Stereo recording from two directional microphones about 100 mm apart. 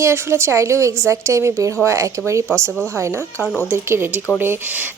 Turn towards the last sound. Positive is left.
turn(degrees=-20)  # may be behind; listen again after turning